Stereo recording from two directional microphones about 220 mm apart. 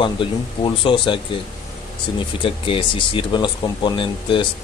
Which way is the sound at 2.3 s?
25° left (ahead or behind).